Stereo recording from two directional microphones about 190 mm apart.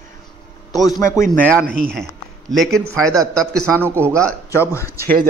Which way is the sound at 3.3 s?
5° left (ahead or behind).